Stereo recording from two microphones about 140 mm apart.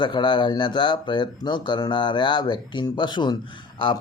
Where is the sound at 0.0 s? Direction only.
35° left (ahead or behind).